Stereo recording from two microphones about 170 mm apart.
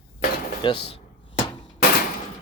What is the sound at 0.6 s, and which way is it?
Speech, 30° left (ahead or behind).